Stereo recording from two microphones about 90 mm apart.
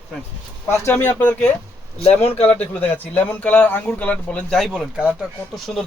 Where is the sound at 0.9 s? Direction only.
20° left (ahead or behind).